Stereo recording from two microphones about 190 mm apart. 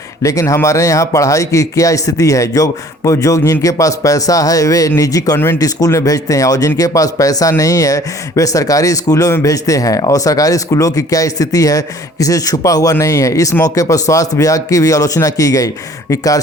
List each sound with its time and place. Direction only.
0.2 s speech: 15° left (ahead or behind)